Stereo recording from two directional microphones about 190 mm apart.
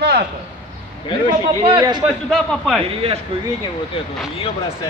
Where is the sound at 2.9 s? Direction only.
30° right (ahead or behind).